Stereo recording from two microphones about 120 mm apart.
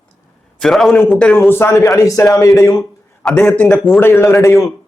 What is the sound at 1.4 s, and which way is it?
A man's voice, 20° left (ahead or behind).